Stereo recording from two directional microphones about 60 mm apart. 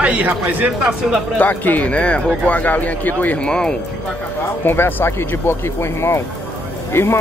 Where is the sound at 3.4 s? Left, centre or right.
Centre.